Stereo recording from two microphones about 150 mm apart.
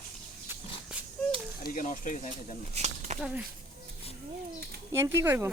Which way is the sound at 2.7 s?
50° right (ahead or behind).